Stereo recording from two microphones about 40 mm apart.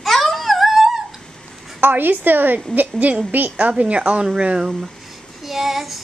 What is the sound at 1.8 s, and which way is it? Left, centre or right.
Speech, right.